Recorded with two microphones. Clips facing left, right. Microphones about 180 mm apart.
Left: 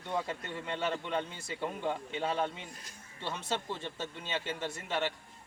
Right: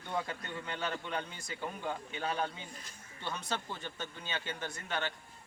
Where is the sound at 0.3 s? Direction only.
25° left (ahead or behind).